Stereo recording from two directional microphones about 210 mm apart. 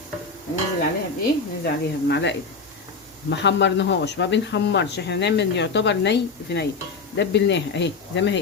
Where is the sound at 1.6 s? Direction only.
55° left (ahead or behind).